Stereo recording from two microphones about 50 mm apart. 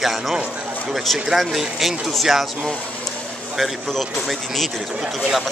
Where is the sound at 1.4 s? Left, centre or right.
Centre.